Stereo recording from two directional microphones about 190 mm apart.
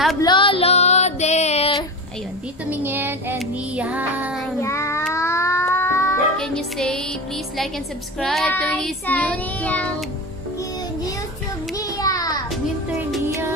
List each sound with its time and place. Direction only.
0.2 s music: 25° left (ahead or behind)
2.7 s child singing: 10° right (ahead or behind)
4.6 s child singing: 15° left (ahead or behind)
5.1 s a sound: 15° left (ahead or behind)
6.4 s child singing: 5° left (ahead or behind)
11.7 s child singing: 20° left (ahead or behind)
12.4 s music: centre (ahead or behind)